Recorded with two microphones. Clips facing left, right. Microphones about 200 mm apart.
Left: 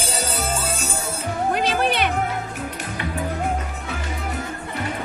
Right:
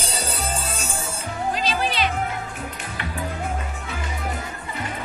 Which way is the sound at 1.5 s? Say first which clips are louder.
Left 3 dB; 60° left (ahead or behind).